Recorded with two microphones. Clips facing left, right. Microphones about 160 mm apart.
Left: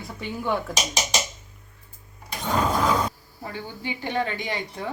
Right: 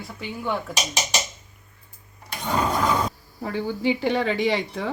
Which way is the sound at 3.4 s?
90° right.